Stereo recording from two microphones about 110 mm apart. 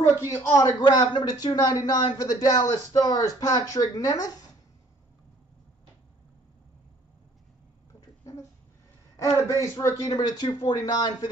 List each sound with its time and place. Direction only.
0.4 s speech: 35° left (ahead or behind)
8.2 s a sound: 30° left (ahead or behind)
9.6 s speech: 30° left (ahead or behind)